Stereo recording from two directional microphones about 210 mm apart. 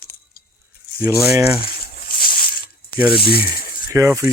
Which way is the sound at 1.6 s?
45° left (ahead or behind).